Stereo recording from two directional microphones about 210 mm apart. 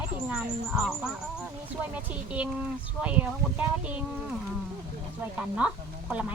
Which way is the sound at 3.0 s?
5° right (ahead or behind).